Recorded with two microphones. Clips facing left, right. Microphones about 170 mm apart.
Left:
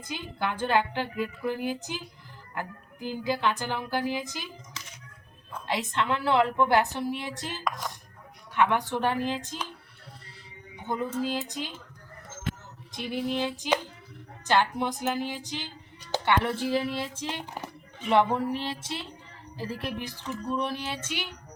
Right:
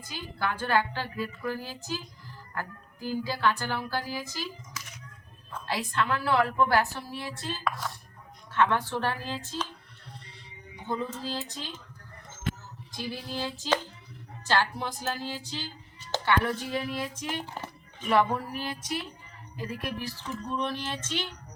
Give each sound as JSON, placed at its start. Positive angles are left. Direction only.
{"t": 0.0, "sound": "a woman's voice", "side_deg": 20}
{"t": 5.5, "sound": "a woman's voice", "side_deg": 15}
{"t": 10.8, "sound": "a woman's voice", "side_deg": 15}
{"t": 12.9, "sound": "a woman's voice", "side_deg": 25}
{"t": 20.5, "sound": "a woman's voice", "side_deg": 10}